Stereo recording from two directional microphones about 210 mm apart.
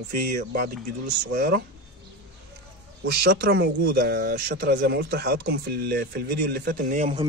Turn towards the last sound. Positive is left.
turn(degrees=-40)  # may be behind; listen again after turning